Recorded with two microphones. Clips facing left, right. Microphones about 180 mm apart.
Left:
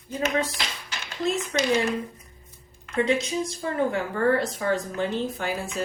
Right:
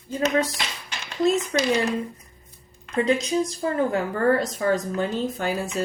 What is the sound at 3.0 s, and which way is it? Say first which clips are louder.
A woman's voice: right 3 dB; 35° right (ahead or behind).